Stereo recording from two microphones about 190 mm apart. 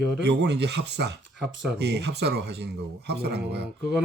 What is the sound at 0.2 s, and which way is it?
Speech, 65° right (ahead or behind).